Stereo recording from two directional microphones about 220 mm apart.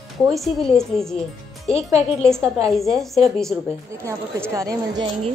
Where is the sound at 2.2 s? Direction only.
Centre (ahead or behind).